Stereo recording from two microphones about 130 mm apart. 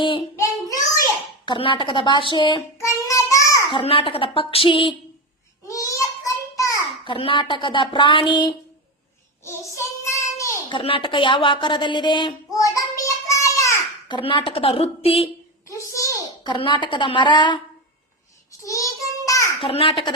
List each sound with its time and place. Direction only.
0.0 s a woman's voice: 40° left (ahead or behind)
0.3 s child singing: 25° left (ahead or behind)
1.5 s a woman's voice: 40° left (ahead or behind)
2.7 s child singing: 25° left (ahead or behind)
3.7 s a woman's voice: 45° left (ahead or behind)
5.6 s a sound: 25° left (ahead or behind)
7.0 s a woman's voice: 40° left (ahead or behind)
9.4 s child singing: 20° left (ahead or behind)
10.7 s a woman's voice: 40° left (ahead or behind)
12.5 s child singing: 25° left (ahead or behind)
14.1 s a woman's voice: 40° left (ahead or behind)
15.6 s a sound: 25° left (ahead or behind)
18.6 s child singing: 25° left (ahead or behind)
19.6 s a woman's voice: 45° left (ahead or behind)